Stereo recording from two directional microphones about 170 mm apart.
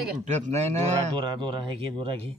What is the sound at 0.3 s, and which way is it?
Speech, 40° right (ahead or behind).